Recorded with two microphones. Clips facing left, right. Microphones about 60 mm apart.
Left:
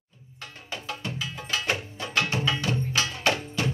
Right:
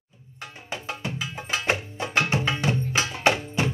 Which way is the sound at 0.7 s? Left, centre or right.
Right.